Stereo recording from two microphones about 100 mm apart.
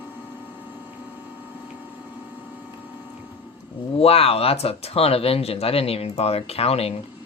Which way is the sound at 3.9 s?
85° left.